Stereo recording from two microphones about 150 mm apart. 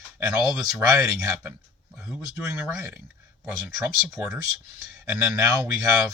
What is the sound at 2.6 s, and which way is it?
Speech, 15° right (ahead or behind).